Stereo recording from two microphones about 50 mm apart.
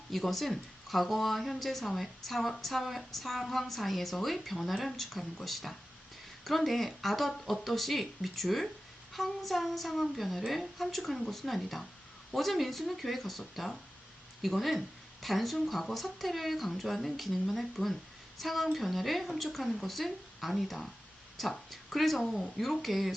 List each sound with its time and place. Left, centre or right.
0.1 s a woman's voice: centre